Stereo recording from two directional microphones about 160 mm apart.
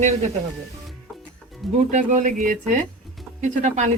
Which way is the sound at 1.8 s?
50° right (ahead or behind).